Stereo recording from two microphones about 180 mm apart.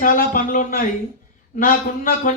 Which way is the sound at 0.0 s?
50° left (ahead or behind).